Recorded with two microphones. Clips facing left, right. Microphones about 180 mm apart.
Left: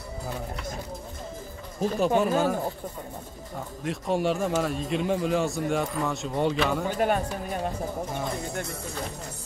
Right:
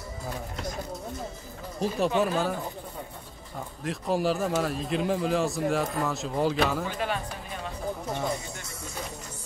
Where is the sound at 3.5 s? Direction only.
Centre (ahead or behind).